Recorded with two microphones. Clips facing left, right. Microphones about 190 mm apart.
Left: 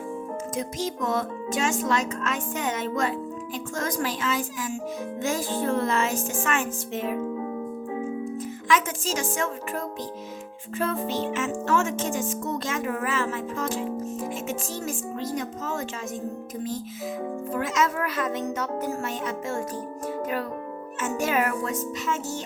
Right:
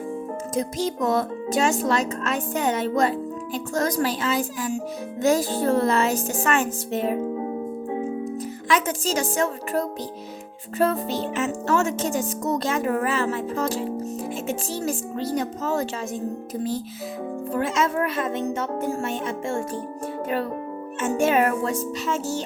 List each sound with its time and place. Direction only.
0.5 s music: 35° right (ahead or behind)
17.5 s speech: 30° right (ahead or behind)
21.0 s music: 30° right (ahead or behind)